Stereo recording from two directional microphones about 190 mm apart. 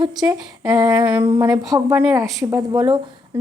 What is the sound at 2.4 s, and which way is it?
Speech, 15° right (ahead or behind).